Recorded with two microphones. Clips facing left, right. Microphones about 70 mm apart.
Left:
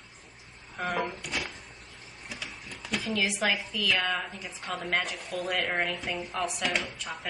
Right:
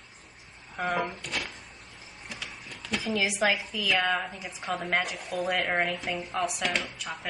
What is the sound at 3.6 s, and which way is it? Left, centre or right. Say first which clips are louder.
A woman's voice: right 2 dB; centre.